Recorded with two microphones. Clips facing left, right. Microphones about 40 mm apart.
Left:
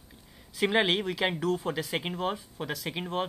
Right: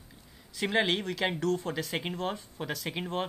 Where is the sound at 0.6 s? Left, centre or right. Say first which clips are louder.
Left 3 dB; centre.